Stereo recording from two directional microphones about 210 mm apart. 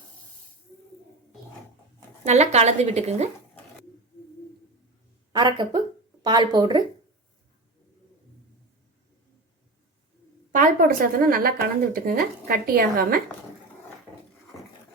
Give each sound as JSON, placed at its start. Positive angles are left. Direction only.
{"t": 2.2, "sound": "a woman's voice", "side_deg": -30}
{"t": 5.3, "sound": "speech", "side_deg": -20}
{"t": 10.5, "sound": "a woman's voice", "side_deg": -40}